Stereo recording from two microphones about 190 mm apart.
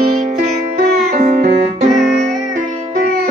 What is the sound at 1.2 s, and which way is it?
Music, 45° right (ahead or behind).